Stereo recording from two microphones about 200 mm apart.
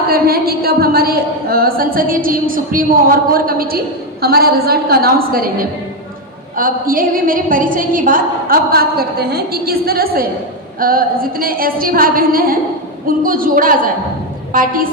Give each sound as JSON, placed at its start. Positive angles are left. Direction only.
{"t": 0.1, "sound": "a woman's voice", "side_deg": -50}